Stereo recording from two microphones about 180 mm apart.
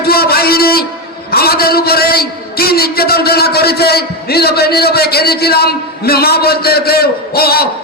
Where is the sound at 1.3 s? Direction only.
60° left (ahead or behind).